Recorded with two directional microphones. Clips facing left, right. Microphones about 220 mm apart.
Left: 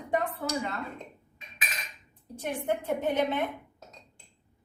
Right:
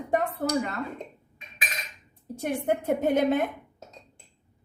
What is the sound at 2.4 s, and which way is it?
Speech, 45° right (ahead or behind).